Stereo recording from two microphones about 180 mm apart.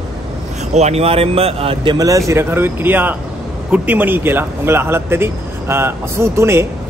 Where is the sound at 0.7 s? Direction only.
35° right (ahead or behind).